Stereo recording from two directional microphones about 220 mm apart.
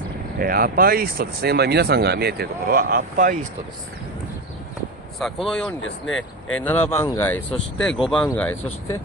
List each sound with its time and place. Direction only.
0.4 s speech: 40° right (ahead or behind)
5.2 s speech: centre (ahead or behind)
5.8 s speech: 60° left (ahead or behind)
6.6 s speech: 10° left (ahead or behind)